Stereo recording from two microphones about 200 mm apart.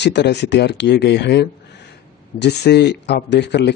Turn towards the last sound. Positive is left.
turn(degrees=60)  # may be behind; listen again after turning